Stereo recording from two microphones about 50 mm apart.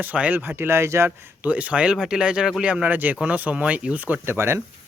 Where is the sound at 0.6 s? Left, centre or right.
Right.